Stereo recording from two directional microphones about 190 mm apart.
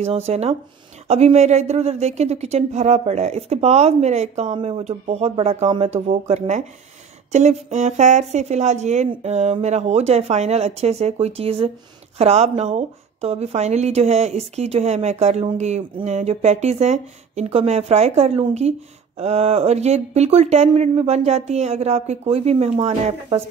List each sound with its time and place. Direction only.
0.0 s a woman's voice: 35° right (ahead or behind)